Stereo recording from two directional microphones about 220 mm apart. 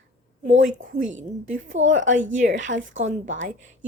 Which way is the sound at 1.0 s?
60° right (ahead or behind).